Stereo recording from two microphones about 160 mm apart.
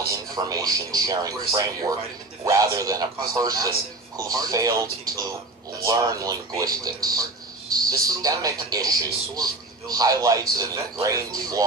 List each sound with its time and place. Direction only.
0.1 s speech: 20° right (ahead or behind)